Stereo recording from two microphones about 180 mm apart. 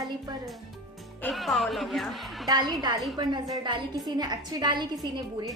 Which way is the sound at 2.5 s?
20° right (ahead or behind).